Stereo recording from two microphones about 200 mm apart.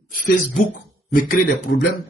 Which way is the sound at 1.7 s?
50° left (ahead or behind).